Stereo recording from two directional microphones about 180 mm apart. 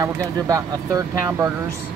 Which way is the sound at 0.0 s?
20° right (ahead or behind).